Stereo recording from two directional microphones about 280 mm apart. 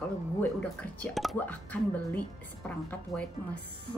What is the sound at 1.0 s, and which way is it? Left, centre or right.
Speech, centre.